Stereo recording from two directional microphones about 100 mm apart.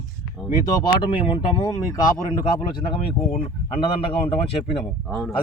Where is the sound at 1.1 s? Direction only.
60° left (ahead or behind).